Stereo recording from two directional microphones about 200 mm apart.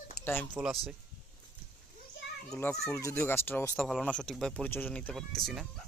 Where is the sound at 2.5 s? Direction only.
10° left (ahead or behind).